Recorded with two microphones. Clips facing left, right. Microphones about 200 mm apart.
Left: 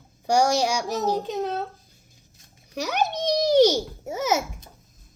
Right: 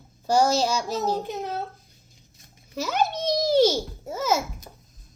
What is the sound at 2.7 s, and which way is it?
Babbling, 15° left (ahead or behind).